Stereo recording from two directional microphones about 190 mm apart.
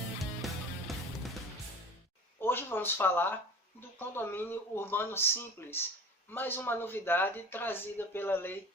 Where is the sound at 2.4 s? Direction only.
10° left (ahead or behind).